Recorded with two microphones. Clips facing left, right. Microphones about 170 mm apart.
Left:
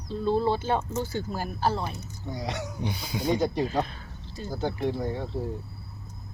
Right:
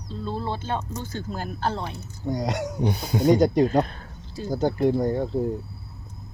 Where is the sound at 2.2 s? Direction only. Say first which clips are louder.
Right 7 dB; 45° right (ahead or behind).